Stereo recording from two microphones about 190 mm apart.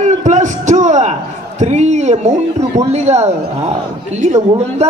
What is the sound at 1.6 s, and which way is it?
A man's voice, 35° right (ahead or behind).